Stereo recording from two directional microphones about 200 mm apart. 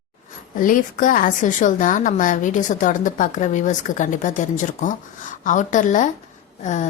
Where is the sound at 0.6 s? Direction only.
40° left (ahead or behind).